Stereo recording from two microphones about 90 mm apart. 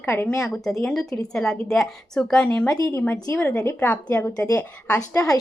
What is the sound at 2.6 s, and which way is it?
Speech, 40° left (ahead or behind).